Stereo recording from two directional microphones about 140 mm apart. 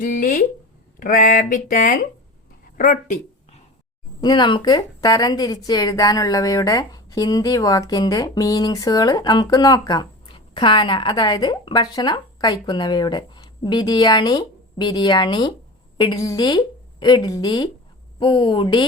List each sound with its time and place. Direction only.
0.0 s speech: 75° left (ahead or behind)
4.2 s a woman's voice: 30° left (ahead or behind)